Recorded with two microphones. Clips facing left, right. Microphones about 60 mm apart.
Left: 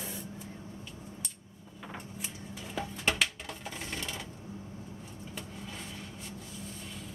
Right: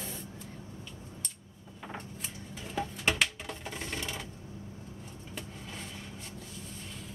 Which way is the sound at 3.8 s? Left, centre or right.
Centre.